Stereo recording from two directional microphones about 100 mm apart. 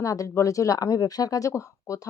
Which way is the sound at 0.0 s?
35° left (ahead or behind).